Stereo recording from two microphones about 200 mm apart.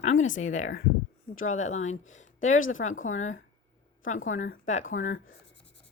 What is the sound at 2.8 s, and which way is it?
Speech, 40° left (ahead or behind).